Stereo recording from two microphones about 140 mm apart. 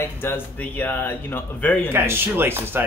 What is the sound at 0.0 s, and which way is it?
Speech, 15° left (ahead or behind).